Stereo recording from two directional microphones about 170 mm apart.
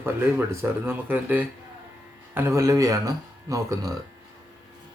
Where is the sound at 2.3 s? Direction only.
15° right (ahead or behind).